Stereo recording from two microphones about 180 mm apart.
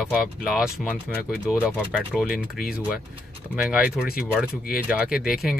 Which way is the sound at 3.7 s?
5° right (ahead or behind).